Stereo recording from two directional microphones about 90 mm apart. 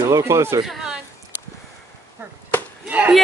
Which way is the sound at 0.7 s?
5° right (ahead or behind).